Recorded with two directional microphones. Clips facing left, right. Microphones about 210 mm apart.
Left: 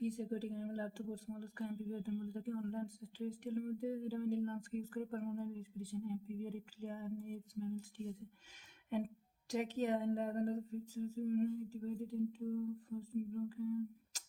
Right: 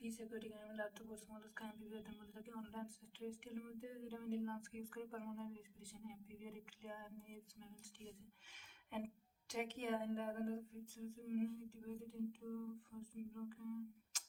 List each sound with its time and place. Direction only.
0.0 s speech: 40° left (ahead or behind)
9.5 s speech: 40° left (ahead or behind)